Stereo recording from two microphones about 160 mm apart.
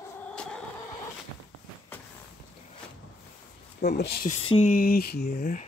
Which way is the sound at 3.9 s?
90° left.